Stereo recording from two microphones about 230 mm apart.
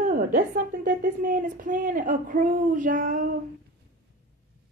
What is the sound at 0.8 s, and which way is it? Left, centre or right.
Speech, right.